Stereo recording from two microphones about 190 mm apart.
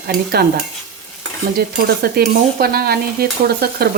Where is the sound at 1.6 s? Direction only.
55° right (ahead or behind).